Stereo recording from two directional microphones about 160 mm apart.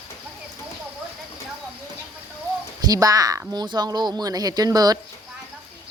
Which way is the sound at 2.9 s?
20° right (ahead or behind).